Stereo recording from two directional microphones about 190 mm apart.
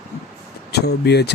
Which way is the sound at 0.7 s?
60° left (ahead or behind).